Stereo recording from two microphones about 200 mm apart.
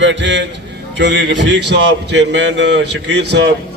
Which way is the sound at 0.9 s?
65° right (ahead or behind).